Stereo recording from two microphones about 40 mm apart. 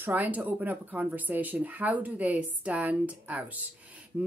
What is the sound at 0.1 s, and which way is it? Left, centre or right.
Speech, right.